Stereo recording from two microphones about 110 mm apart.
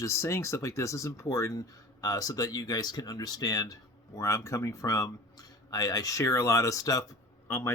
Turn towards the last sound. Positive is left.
turn(degrees=20)  # may be behind; listen again after turning